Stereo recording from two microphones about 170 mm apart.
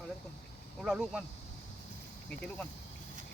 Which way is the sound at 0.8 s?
5° right (ahead or behind).